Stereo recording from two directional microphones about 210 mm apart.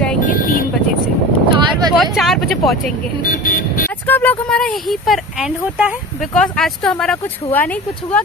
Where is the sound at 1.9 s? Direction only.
Centre (ahead or behind).